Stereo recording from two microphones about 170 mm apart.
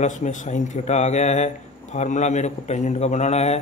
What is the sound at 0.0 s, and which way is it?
Speech, 45° left (ahead or behind).